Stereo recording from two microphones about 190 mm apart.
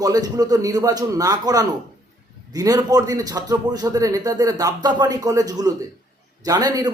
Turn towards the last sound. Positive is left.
turn(degrees=-20)  # may be behind; listen again after turning